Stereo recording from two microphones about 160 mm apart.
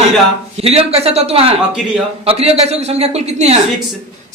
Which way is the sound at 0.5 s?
40° right (ahead or behind).